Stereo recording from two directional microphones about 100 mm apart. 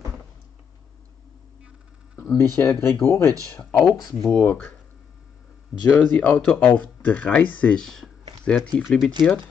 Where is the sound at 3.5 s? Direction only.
10° left (ahead or behind).